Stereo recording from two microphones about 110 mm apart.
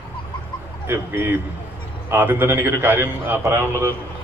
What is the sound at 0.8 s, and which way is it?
A man's voice, 20° right (ahead or behind).